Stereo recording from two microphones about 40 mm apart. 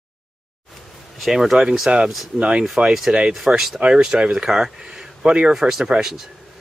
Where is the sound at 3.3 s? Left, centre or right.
Centre.